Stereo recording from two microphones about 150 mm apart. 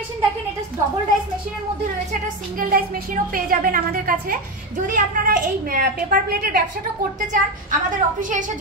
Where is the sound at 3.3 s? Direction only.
70° right (ahead or behind).